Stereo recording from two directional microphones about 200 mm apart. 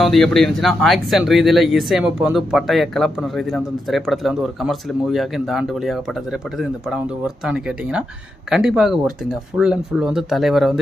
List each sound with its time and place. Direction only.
0.0 s speech: centre (ahead or behind)